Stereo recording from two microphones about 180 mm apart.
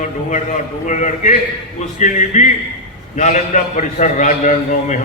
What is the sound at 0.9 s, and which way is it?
A man's voice, 45° left (ahead or behind).